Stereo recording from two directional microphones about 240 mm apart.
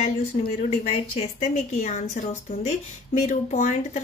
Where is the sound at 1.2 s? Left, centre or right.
Left.